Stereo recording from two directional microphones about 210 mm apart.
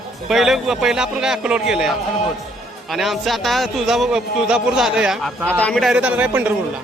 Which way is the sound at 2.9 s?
Centre (ahead or behind).